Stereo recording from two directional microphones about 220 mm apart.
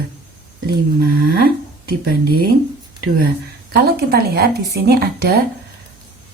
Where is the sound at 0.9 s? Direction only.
45° right (ahead or behind).